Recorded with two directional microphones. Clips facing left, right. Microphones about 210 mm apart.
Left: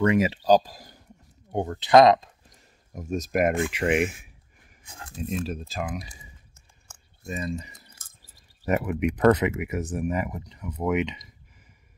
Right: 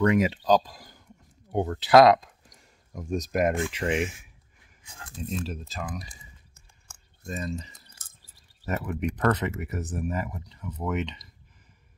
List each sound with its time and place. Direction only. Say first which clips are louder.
0.1 s speech: left 1 dB; 5° left (ahead or behind)
1.5 s speech: left 1 dB; 5° right (ahead or behind)
3.1 s speech: left 1 dB; 10° left (ahead or behind)
5.2 s speech: left 3 dB; 10° left (ahead or behind)
7.2 s speech: left 2 dB; 10° left (ahead or behind)